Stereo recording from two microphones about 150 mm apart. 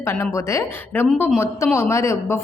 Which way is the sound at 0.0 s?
20° left (ahead or behind).